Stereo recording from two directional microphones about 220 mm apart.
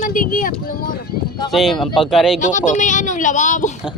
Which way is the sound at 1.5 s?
Centre (ahead or behind).